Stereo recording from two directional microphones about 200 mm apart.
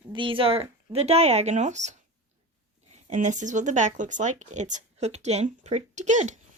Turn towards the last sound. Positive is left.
turn(degrees=-35)  # may be behind; listen again after turning